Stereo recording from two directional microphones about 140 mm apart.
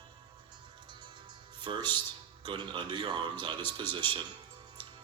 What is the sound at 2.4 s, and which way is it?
Speech, 35° right (ahead or behind).